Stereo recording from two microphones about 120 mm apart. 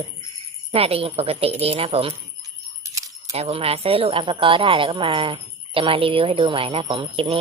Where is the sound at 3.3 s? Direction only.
55° right (ahead or behind).